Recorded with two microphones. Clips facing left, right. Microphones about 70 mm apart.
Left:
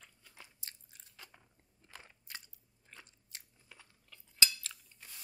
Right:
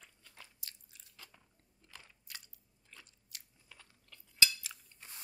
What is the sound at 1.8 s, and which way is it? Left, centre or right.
Biting, left.